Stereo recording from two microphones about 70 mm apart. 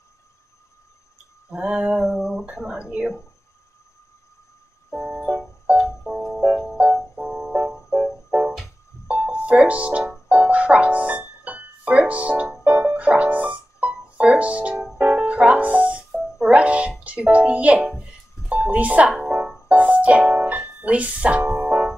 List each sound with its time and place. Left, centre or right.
1.5 s a child's voice: right
2.1 s speech: centre
4.8 s music: centre
9.0 s music: centre
16.4 s a child's voice: centre
18.5 s music: right
19.7 s speech: right
21.5 s music: right